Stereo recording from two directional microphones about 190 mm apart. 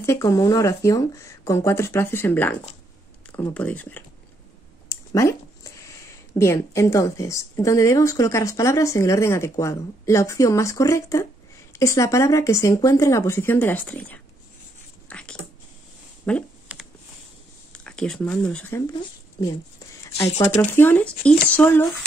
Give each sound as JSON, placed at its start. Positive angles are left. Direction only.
{"t": 0.0, "sound": "speech", "side_deg": 15}
{"t": 15.0, "sound": "dog", "side_deg": 5}
{"t": 16.3, "sound": "speech", "side_deg": 5}
{"t": 16.7, "sound": "a sound", "side_deg": -10}
{"t": 17.7, "sound": "speech", "side_deg": 5}
{"t": 20.5, "sound": "speech", "side_deg": 10}